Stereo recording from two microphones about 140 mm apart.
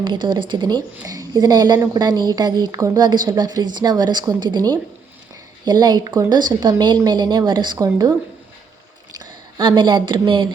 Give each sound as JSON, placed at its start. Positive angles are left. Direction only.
{"t": 0.0, "sound": "a woman's voice", "side_deg": -35}
{"t": 9.1, "sound": "speech", "side_deg": -35}